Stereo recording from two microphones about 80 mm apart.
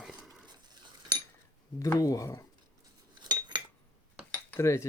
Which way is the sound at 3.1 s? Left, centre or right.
Right.